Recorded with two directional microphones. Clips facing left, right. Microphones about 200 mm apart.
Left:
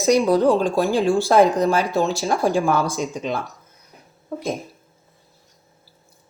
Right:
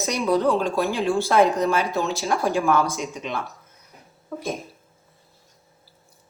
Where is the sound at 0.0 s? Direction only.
35° left (ahead or behind).